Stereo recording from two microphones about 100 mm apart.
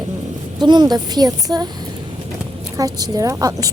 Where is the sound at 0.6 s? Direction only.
50° right (ahead or behind).